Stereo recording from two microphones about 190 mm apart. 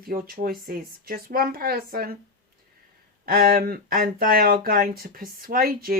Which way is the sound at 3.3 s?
50° right (ahead or behind).